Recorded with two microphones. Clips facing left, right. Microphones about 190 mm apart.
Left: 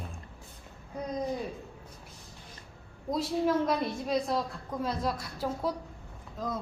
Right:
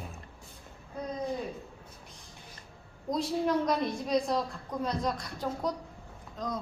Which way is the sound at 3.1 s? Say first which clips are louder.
Left 1 dB; 5° left (ahead or behind).